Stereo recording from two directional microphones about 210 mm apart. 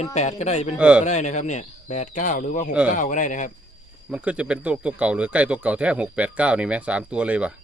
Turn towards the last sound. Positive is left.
turn(degrees=-5)  # may be behind; listen again after turning